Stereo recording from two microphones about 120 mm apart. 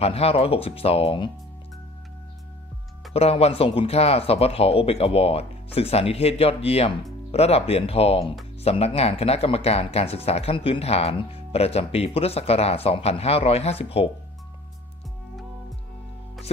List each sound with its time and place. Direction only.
0.0 s speech: 55° left (ahead or behind)
3.1 s speech: 55° left (ahead or behind)